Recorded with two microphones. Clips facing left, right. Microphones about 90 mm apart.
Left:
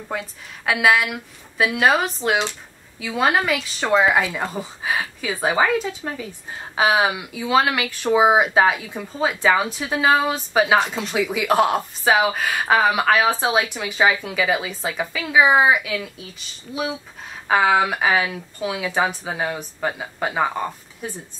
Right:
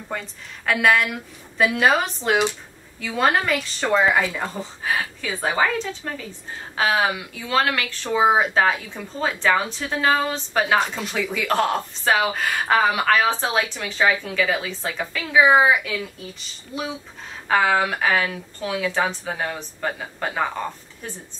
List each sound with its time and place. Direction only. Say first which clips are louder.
0.1 s a woman's voice: left 2 dB; 5° left (ahead or behind)
17.5 s speech: left 2 dB; 15° left (ahead or behind)